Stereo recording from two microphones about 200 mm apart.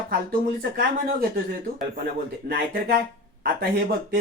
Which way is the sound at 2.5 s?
50° right (ahead or behind).